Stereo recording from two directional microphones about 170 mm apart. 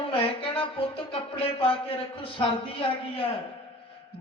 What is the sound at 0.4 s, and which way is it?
Music, 35° left (ahead or behind).